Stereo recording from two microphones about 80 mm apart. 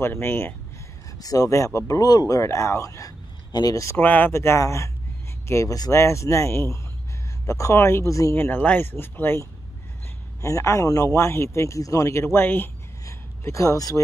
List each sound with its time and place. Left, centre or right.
0.0 s speech: left
1.2 s speech: left
3.5 s speech: left
3.9 s a man's voice: left
8.4 s a man's voice: left
13.0 s a man's voice: left